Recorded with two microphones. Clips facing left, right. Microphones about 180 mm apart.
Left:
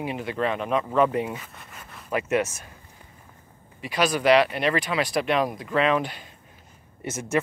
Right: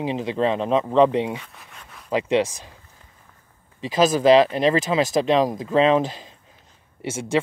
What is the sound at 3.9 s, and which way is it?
Speech, 30° right (ahead or behind).